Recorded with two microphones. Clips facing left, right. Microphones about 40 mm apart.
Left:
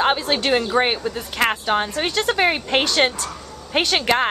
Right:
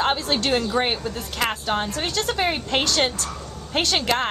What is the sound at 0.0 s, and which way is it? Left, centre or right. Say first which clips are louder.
Speech: left 3 dB; left.